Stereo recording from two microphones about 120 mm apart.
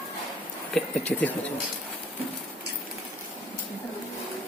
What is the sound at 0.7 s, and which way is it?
Speech, 10° left (ahead or behind).